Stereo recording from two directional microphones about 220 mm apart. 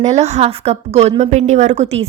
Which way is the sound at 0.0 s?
30° right (ahead or behind).